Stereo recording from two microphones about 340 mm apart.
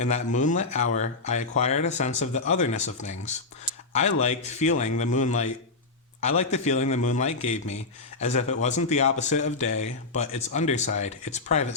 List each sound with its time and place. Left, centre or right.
0.0 s speech: left
4.2 s speech: centre